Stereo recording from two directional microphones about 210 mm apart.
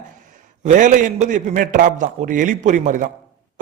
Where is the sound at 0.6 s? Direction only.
40° right (ahead or behind).